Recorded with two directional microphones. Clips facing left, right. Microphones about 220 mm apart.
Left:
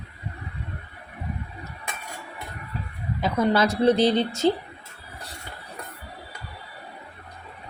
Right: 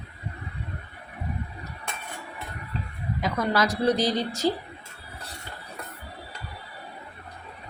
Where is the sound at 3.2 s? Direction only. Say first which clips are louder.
Left 4 dB; 25° left (ahead or behind).